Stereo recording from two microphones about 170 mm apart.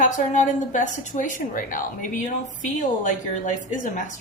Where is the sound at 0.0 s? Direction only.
45° left (ahead or behind).